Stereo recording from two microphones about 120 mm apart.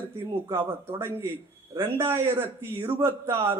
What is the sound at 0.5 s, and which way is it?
A man's voice, 20° right (ahead or behind).